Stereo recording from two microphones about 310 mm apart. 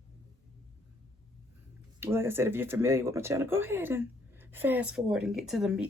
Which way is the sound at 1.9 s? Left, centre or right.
Centre.